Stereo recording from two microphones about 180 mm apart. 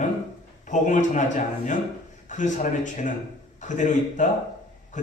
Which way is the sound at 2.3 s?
40° left (ahead or behind).